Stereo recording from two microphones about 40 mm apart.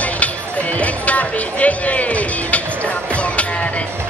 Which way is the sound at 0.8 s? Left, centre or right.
Left.